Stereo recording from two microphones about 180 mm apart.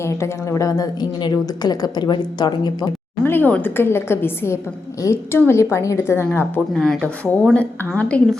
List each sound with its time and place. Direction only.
0.0 s a woman's voice: 15° left (ahead or behind)
3.2 s a woman's voice: 10° left (ahead or behind)